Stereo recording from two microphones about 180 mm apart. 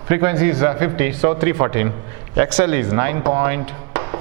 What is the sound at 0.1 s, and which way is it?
Speech, 15° right (ahead or behind).